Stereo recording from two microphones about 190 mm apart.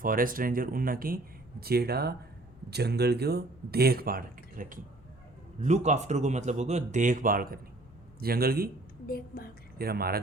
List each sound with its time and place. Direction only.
0.0 s speech: 45° right (ahead or behind)
9.0 s a woman's voice: 50° left (ahead or behind)
9.7 s speech: 55° right (ahead or behind)